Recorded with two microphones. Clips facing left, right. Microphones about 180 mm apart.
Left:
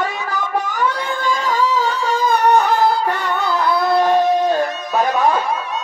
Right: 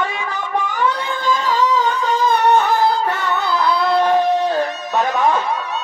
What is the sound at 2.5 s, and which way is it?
Music, 15° left (ahead or behind).